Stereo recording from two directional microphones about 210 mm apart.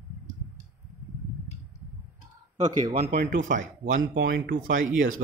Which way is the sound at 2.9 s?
45° right (ahead or behind).